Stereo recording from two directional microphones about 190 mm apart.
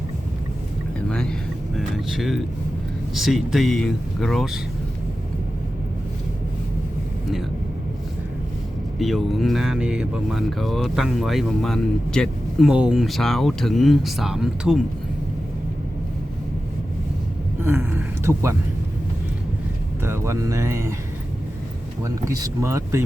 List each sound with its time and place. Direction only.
0.9 s speech: 5° left (ahead or behind)
9.0 s speech: centre (ahead or behind)
17.6 s a sound: 10° right (ahead or behind)
20.0 s speech: 15° right (ahead or behind)
22.0 s speech: 20° right (ahead or behind)